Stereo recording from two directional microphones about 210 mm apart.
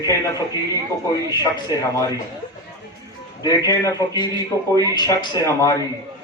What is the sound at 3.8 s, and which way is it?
Speech, 20° left (ahead or behind).